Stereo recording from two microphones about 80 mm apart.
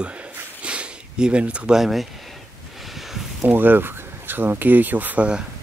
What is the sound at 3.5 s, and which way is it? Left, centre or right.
Speech, right.